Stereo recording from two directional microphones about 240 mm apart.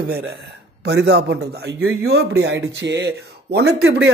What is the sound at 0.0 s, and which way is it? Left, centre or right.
Speech, right.